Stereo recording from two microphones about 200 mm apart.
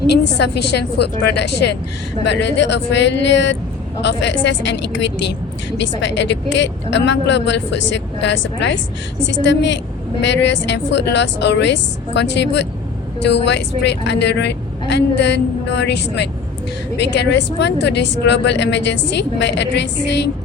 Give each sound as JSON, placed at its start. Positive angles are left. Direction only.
{"t": 0.3, "sound": "a woman's voice", "side_deg": 55}